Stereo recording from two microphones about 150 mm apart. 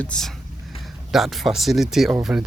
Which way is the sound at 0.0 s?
5° left (ahead or behind).